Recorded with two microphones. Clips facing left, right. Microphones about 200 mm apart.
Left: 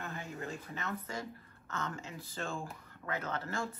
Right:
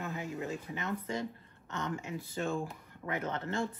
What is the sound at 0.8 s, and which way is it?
A woman's voice, 15° right (ahead or behind).